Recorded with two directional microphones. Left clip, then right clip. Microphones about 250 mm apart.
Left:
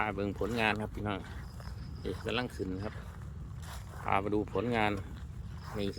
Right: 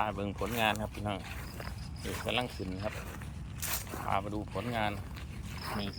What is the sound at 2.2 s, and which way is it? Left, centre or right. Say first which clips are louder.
Speech: right 2 dB; centre.